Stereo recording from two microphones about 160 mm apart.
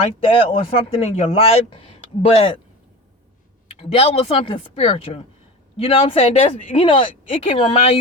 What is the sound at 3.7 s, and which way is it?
Speech, 35° left (ahead or behind).